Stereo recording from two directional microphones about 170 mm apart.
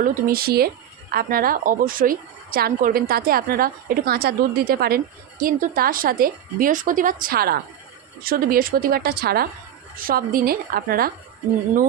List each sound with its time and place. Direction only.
0.0 s a woman's voice: 55° right (ahead or behind)